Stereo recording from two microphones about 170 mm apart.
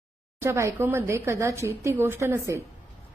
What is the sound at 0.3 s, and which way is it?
A woman's voice, 15° right (ahead or behind).